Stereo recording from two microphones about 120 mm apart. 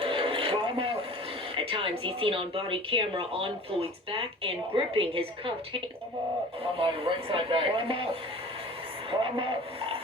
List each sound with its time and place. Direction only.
0.0 s a sound: 50° right (ahead or behind)
1.5 s speech: 45° right (ahead or behind)
6.7 s speech: 50° right (ahead or behind)